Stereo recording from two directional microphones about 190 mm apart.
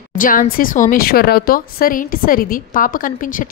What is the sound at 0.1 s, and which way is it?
A woman's voice, 45° left (ahead or behind).